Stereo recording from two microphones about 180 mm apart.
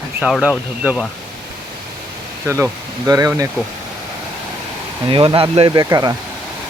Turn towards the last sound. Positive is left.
turn(degrees=-20)  # may be behind; listen again after turning